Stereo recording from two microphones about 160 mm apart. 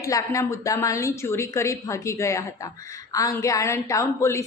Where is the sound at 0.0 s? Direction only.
20° left (ahead or behind).